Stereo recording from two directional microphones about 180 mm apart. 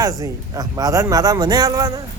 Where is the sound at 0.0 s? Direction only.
20° right (ahead or behind).